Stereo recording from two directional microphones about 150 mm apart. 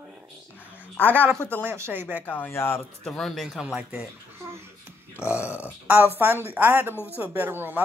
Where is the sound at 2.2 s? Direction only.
10° left (ahead or behind).